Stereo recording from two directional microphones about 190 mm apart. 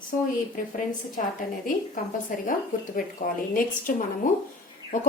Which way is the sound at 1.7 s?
45° left (ahead or behind).